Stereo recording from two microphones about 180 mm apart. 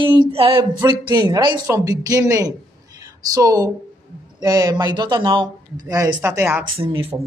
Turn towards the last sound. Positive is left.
turn(degrees=-30)  # may be behind; listen again after turning